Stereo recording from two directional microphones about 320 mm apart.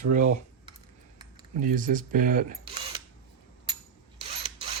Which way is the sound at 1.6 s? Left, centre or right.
Right.